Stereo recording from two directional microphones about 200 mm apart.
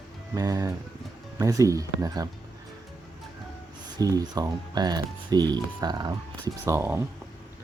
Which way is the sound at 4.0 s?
20° right (ahead or behind).